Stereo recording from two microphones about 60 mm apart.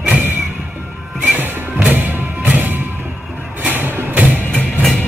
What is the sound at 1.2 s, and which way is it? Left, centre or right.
Music, right.